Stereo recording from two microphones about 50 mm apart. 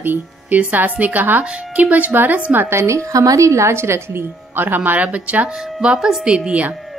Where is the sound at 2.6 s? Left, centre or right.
Right.